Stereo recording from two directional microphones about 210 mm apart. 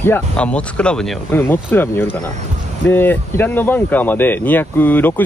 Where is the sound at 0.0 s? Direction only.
10° left (ahead or behind).